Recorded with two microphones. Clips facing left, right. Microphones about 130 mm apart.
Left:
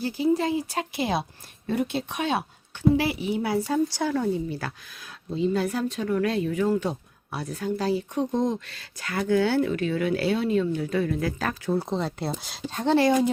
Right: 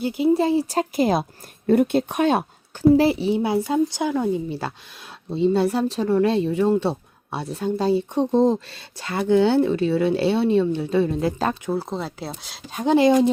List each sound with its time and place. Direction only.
0.0 s speech: 25° right (ahead or behind)
0.7 s speech: 40° right (ahead or behind)
2.9 s speech: 35° right (ahead or behind)
11.7 s speech: 5° right (ahead or behind)
12.7 s speech: 15° right (ahead or behind)